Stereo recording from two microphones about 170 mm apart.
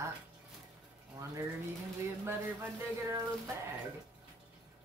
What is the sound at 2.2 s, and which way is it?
Speech, 15° right (ahead or behind).